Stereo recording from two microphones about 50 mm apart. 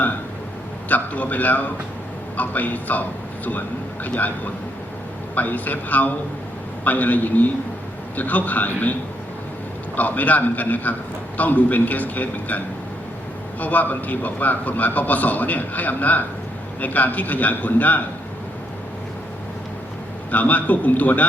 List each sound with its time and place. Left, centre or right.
0.9 s a man's voice: left
20.3 s a man's voice: left